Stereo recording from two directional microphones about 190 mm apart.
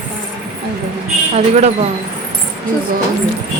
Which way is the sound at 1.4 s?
35° right (ahead or behind).